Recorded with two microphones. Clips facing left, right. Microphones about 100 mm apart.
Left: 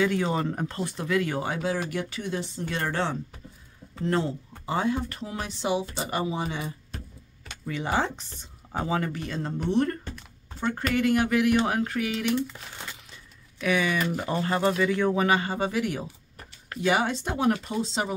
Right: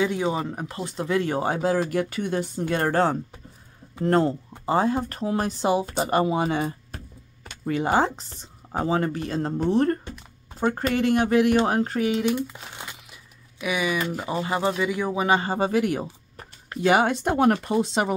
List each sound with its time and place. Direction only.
0.0 s speech: 15° right (ahead or behind)
0.7 s speech: 20° right (ahead or behind)
12.1 s speech: 20° right (ahead or behind)
15.2 s speech: 30° right (ahead or behind); by 18.1 s 55° right (ahead or behind)